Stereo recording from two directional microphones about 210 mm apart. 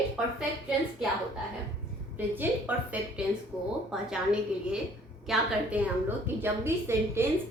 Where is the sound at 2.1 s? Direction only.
10° right (ahead or behind).